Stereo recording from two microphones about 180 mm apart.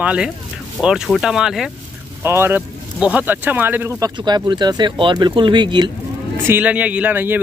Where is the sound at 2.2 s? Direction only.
15° right (ahead or behind).